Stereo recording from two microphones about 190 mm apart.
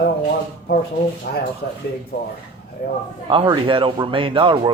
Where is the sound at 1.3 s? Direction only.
55° left (ahead or behind).